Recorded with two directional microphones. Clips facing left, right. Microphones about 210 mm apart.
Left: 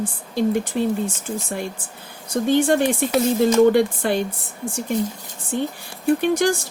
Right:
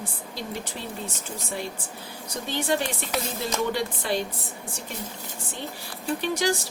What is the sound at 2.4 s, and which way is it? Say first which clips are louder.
A woman's voice: left 10 dB; 55° left (ahead or behind).